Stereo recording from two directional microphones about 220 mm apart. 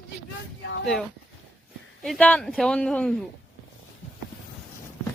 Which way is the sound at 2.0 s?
5° left (ahead or behind).